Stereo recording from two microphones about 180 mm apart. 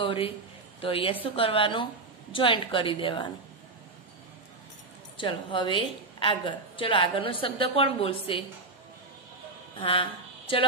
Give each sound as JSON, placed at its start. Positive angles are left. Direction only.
{"t": 0.0, "sound": "a woman's voice", "side_deg": 30}
{"t": 5.1, "sound": "a woman's voice", "side_deg": 30}
{"t": 9.8, "sound": "speech", "side_deg": 30}